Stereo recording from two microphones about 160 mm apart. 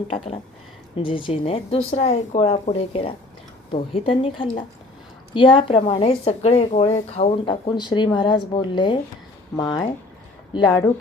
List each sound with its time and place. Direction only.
0.9 s a woman's voice: 30° left (ahead or behind)
5.3 s a woman's voice: 30° left (ahead or behind)